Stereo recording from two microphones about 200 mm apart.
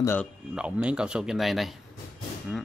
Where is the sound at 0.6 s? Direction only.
5° right (ahead or behind).